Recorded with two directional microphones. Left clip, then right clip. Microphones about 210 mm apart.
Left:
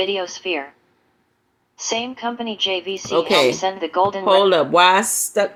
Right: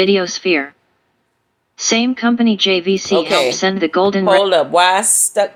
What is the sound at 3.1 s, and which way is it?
Speech, 40° left (ahead or behind).